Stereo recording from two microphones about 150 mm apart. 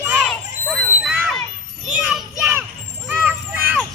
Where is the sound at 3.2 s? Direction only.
15° right (ahead or behind).